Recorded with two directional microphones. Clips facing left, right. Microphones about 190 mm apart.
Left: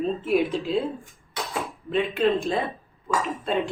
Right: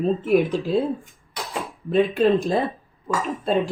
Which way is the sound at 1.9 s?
35° right (ahead or behind).